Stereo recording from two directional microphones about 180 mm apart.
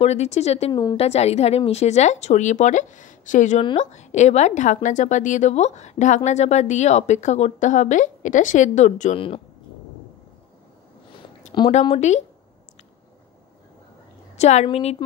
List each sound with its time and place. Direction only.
0.0 s speech: 35° left (ahead or behind)
11.8 s speech: 35° left (ahead or behind)
14.3 s speech: 40° left (ahead or behind)